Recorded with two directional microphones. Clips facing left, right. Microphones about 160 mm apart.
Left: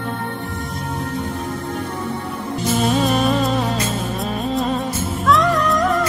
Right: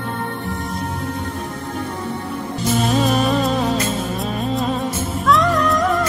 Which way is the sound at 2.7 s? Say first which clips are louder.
Even; centre (ahead or behind).